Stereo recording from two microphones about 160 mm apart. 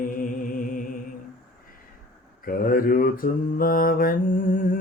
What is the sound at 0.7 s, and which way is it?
Music, 55° left (ahead or behind).